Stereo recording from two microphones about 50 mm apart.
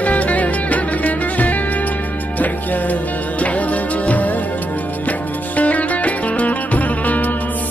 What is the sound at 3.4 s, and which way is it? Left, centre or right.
Music, left.